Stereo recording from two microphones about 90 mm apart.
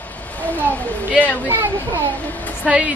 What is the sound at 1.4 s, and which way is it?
Speech, 20° right (ahead or behind).